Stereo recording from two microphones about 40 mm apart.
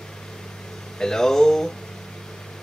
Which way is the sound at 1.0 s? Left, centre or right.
Centre.